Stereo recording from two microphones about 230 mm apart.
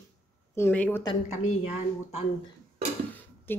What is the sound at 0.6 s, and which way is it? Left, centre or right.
Female singing, centre.